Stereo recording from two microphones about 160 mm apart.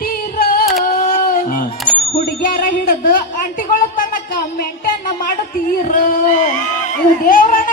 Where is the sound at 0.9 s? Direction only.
60° left (ahead or behind).